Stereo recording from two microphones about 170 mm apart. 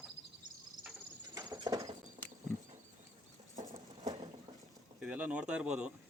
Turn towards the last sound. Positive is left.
turn(degrees=-5)  # may be behind; listen again after turning